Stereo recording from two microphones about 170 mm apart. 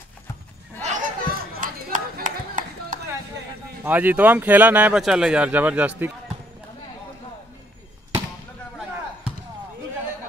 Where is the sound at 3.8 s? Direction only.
10° right (ahead or behind).